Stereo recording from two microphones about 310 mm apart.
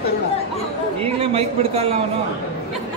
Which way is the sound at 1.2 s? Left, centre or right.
Centre.